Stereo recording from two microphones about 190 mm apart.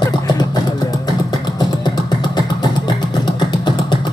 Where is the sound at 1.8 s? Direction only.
20° left (ahead or behind).